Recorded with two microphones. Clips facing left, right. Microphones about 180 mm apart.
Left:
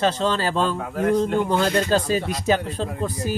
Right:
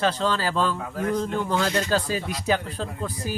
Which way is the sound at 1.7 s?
55° left (ahead or behind).